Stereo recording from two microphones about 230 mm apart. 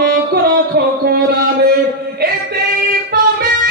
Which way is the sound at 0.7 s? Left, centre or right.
Right.